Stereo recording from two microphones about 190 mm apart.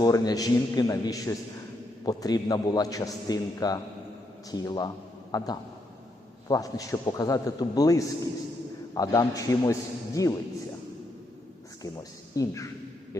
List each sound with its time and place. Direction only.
0.0 s a man's voice: 20° left (ahead or behind)
6.5 s a man's voice: 20° left (ahead or behind)
12.3 s a man's voice: 15° left (ahead or behind)